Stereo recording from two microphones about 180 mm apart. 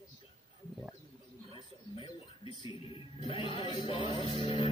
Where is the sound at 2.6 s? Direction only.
30° left (ahead or behind).